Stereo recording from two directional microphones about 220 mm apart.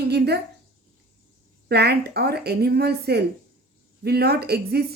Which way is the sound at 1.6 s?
50° right (ahead or behind).